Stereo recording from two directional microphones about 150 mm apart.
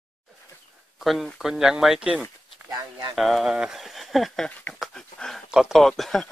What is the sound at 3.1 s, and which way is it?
Speech, centre (ahead or behind).